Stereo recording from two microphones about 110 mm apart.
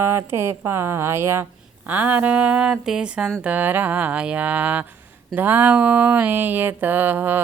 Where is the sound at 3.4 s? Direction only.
15° right (ahead or behind).